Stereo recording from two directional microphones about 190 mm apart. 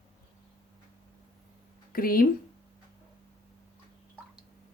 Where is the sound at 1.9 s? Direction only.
50° left (ahead or behind).